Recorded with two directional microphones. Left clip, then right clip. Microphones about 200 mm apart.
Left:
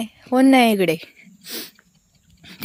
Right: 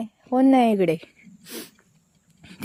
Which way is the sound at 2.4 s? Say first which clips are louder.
Left 4 dB; 10° right (ahead or behind).